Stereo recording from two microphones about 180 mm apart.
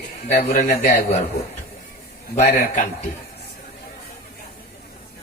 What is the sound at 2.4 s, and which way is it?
Speech, 40° left (ahead or behind).